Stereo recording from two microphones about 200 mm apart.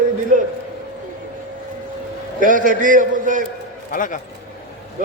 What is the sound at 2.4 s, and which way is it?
A man's voice, 40° right (ahead or behind).